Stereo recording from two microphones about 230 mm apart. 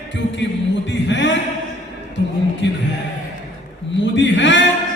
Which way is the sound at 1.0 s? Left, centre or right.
Left.